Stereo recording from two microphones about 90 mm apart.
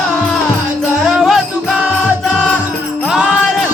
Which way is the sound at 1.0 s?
5° right (ahead or behind).